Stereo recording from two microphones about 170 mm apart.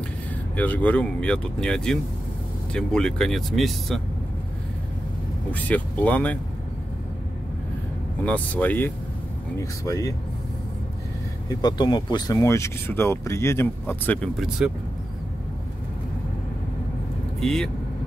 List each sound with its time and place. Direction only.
0.6 s speech: 10° left (ahead or behind)
5.5 s speech: 10° left (ahead or behind)
8.3 s speech: 10° left (ahead or behind)
11.4 s speech: 25° left (ahead or behind); by 14.7 s centre (ahead or behind)
17.4 s speech: centre (ahead or behind)